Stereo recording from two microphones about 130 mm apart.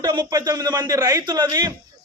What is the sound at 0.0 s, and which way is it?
A man's voice, 30° right (ahead or behind).